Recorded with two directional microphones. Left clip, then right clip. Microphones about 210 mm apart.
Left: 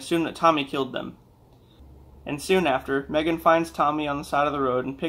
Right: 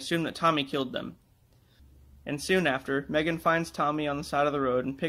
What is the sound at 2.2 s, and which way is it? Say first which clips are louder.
Speech: left 4 dB; 40° right (ahead or behind).